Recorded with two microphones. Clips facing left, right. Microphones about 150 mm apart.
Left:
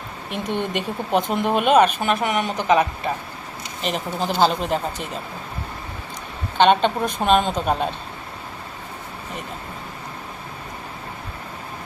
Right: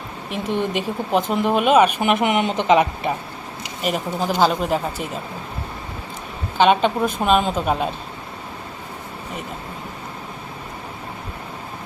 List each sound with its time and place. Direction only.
0.3 s speech: centre (ahead or behind)
2.0 s a woman's voice: 20° right (ahead or behind)
3.8 s speech: 5° right (ahead or behind)
6.6 s speech: 5° right (ahead or behind)